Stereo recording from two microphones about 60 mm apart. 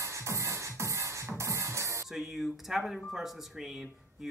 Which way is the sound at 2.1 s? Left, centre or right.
Centre.